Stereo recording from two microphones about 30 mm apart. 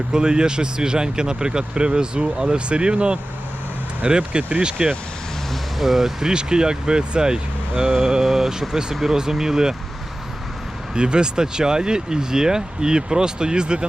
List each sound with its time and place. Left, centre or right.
0.1 s speech: right
4.2 s speech: right
4.6 s speech: right
5.8 s speech: centre
6.3 s speech: right
8.2 s speech: centre
10.9 s speech: right